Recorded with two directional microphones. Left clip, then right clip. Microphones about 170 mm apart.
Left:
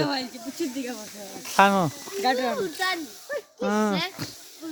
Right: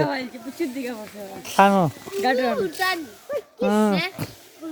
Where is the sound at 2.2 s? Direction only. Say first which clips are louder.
Right 3 dB; 25° right (ahead or behind).